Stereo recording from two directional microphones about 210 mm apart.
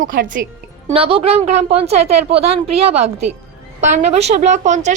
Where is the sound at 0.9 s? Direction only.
25° right (ahead or behind).